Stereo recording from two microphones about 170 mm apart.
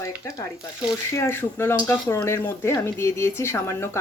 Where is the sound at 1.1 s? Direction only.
15° left (ahead or behind).